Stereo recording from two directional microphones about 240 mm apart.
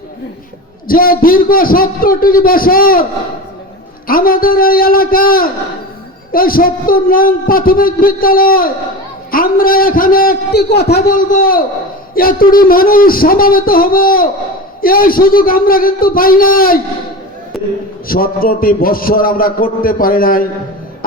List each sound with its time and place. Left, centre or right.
0.9 s a man's voice: left
18.1 s a man's voice: left